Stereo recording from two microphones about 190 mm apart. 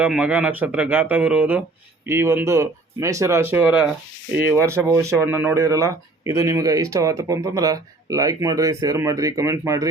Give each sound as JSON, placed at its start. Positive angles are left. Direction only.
{"t": 0.0, "sound": "speech", "side_deg": -5}